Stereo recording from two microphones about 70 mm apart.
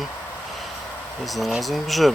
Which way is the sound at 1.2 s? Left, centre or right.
Centre.